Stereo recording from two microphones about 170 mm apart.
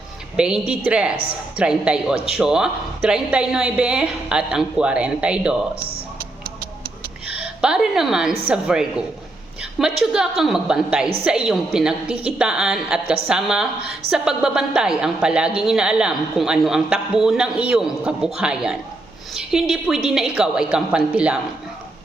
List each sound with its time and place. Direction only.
0.3 s a woman's voice: 5° right (ahead or behind)
6.1 s music: 60° right (ahead or behind)
7.3 s a woman's voice: 5° right (ahead or behind)
10.0 s a woman's voice: 5° right (ahead or behind)